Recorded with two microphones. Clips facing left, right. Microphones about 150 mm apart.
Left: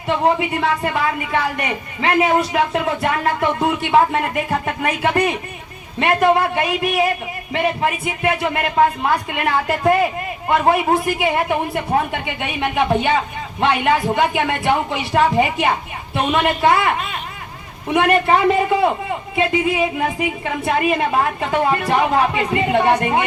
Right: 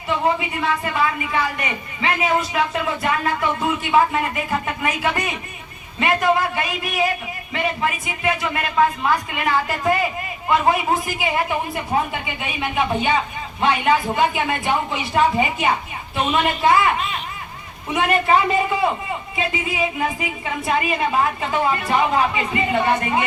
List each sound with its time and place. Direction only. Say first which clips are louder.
1.2 s speech: left 2 dB; 60° left (ahead or behind)